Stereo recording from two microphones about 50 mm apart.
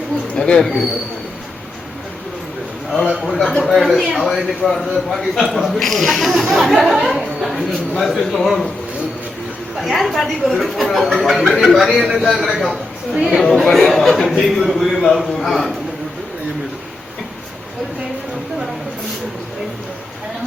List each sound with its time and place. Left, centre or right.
0.3 s a sound: centre
0.6 s a man's voice: centre
2.9 s a man's voice: centre
9.8 s a man's voice: centre